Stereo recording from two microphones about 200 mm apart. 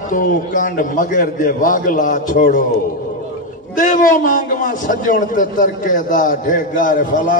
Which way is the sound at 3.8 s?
40° left (ahead or behind).